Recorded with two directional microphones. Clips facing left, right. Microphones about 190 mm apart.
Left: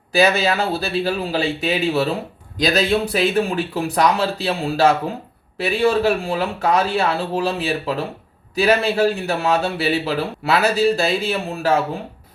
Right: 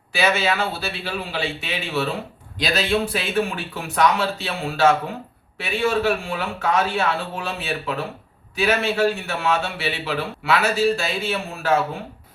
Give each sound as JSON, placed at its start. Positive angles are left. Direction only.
{"t": 0.1, "sound": "speech", "side_deg": 40}